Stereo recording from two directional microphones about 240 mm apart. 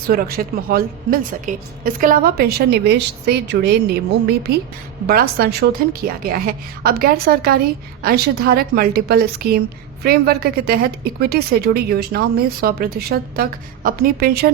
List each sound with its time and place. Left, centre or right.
0.1 s a woman's voice: right